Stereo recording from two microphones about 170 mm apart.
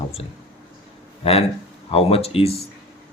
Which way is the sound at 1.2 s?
35° left (ahead or behind).